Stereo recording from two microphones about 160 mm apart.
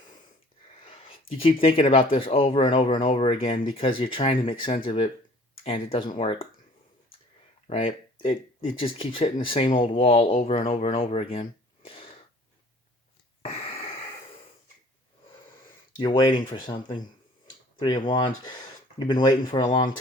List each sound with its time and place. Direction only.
0.8 s a sound: 35° left (ahead or behind)
1.6 s speech: 35° left (ahead or behind)
7.7 s speech: 35° left (ahead or behind)
13.4 s a sound: 35° left (ahead or behind)
16.0 s speech: 30° left (ahead or behind)
17.7 s speech: 25° left (ahead or behind)